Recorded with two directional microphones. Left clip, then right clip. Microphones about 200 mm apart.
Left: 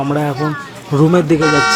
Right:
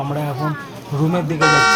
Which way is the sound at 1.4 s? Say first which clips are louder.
Right 5 dB; centre (ahead or behind).